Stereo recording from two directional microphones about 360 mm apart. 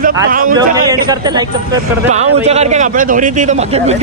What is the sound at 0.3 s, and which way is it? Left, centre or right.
Speech, right.